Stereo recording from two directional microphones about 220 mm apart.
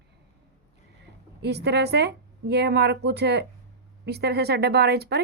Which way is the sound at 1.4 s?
50° right (ahead or behind).